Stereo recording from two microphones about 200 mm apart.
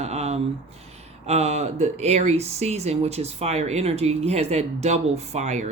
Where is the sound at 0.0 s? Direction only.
35° right (ahead or behind).